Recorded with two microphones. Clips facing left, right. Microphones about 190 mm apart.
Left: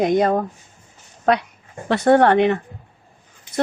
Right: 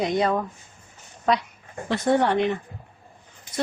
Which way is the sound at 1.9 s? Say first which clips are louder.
Left 7 dB; 65° left (ahead or behind).